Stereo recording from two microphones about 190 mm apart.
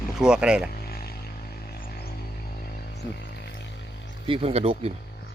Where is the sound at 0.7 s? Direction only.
55° left (ahead or behind).